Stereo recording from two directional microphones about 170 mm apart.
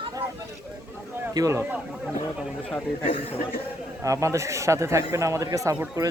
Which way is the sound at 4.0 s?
20° right (ahead or behind).